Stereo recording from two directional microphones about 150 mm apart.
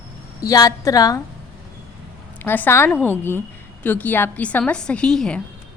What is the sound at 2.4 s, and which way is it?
A woman's voice, 15° left (ahead or behind).